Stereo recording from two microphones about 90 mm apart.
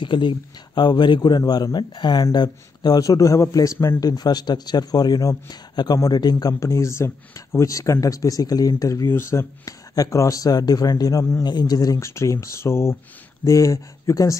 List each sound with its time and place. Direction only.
0.0 s a man's voice: 65° left (ahead or behind); by 4.0 s 30° left (ahead or behind)
4.0 s speech: 45° left (ahead or behind)
6.6 s speech: 30° left (ahead or behind)
12.0 s speech: 30° left (ahead or behind)